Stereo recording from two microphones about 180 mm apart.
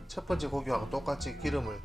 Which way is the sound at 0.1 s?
Centre (ahead or behind).